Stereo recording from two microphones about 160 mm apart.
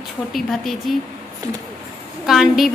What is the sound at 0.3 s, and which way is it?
Speech, centre (ahead or behind).